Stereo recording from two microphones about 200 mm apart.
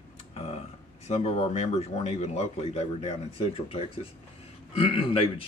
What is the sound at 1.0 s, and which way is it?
Speech, 30° left (ahead or behind).